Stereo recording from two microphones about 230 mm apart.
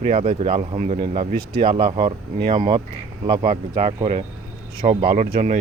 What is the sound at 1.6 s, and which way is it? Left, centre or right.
Speech, right.